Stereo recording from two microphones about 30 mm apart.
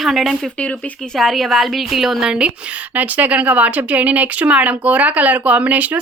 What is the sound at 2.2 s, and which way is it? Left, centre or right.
Speech, right.